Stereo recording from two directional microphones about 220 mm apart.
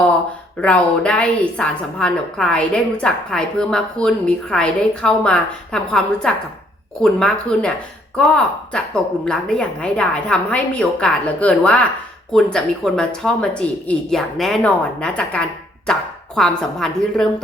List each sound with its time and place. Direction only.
0.6 s a woman's voice: 5° left (ahead or behind)